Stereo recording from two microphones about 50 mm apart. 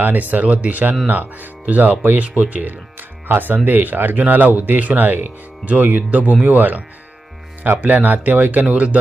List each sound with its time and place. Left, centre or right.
0.0 s speech: right